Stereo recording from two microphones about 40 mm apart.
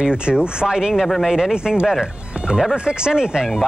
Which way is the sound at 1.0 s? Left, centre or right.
Centre.